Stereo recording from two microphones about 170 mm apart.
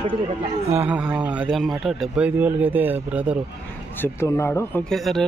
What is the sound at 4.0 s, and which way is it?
Speech, 15° left (ahead or behind).